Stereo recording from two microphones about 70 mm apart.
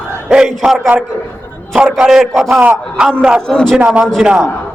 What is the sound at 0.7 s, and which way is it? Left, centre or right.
Speech, right.